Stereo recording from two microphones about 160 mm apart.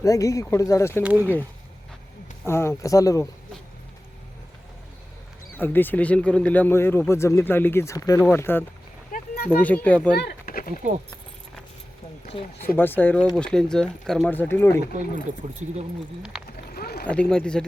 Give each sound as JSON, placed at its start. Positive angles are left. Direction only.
{"t": 0.0, "sound": "speech", "side_deg": 20}
{"t": 1.0, "sound": "speech", "side_deg": -10}
{"t": 2.5, "sound": "speech", "side_deg": 15}
{"t": 5.5, "sound": "speech", "side_deg": 10}
{"t": 9.1, "sound": "a sound", "side_deg": 70}
{"t": 9.5, "sound": "speech", "side_deg": 10}
{"t": 10.2, "sound": "a sound", "side_deg": 70}
{"t": 12.2, "sound": "speech", "side_deg": 40}
{"t": 12.6, "sound": "speech", "side_deg": 10}
{"t": 16.5, "sound": "rowboat", "side_deg": 70}
{"t": 17.1, "sound": "speech", "side_deg": 5}